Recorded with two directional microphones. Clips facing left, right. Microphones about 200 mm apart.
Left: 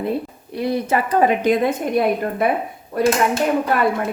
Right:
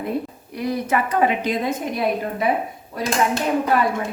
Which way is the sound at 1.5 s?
55° left (ahead or behind).